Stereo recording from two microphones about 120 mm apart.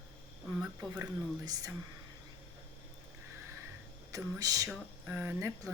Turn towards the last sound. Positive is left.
turn(degrees=-25)  # may be behind; listen again after turning